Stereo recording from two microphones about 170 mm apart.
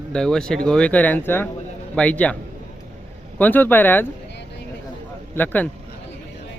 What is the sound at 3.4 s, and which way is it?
Speech, 10° left (ahead or behind).